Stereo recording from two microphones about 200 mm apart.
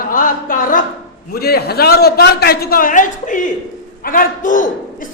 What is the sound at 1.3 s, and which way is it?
A man's voice, 50° left (ahead or behind).